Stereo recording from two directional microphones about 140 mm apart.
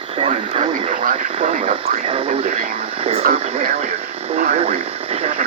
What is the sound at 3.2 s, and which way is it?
Speech, 80° right.